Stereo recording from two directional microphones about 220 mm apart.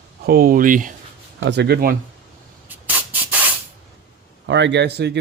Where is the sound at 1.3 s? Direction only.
55° right (ahead or behind).